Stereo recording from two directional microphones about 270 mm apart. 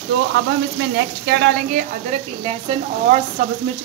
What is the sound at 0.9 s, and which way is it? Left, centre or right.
Speech, right.